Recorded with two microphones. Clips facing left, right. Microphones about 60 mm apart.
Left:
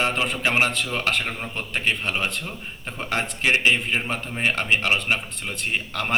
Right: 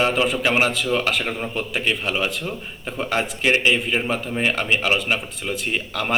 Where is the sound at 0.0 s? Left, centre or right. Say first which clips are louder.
Right 4 dB; centre.